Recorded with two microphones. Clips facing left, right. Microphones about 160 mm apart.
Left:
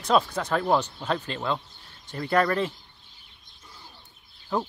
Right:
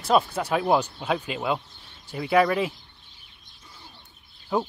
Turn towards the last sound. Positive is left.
turn(degrees=-10)  # may be behind; listen again after turning